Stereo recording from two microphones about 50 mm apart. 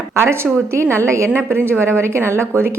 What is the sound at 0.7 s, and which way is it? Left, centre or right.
Speech, right.